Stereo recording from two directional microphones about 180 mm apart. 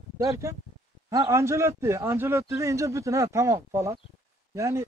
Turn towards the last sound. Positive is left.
turn(degrees=-15)  # may be behind; listen again after turning